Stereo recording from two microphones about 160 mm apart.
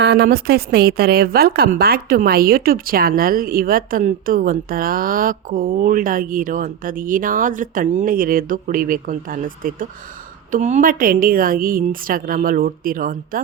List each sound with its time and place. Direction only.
0.0 s a woman's voice: 90° right; by 13.4 s 60° right (ahead or behind)